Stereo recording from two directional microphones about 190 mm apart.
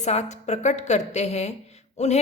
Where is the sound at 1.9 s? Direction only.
35° left (ahead or behind).